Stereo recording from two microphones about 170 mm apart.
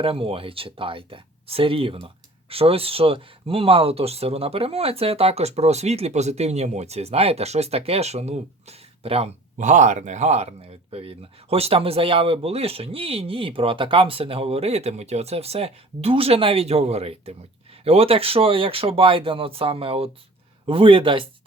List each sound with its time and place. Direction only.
0.0 s speech: 35° right (ahead or behind)